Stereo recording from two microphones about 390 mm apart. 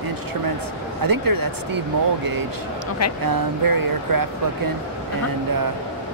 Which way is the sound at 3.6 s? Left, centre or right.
Right.